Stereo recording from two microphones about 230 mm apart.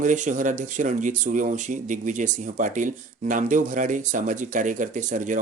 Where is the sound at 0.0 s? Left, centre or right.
Right.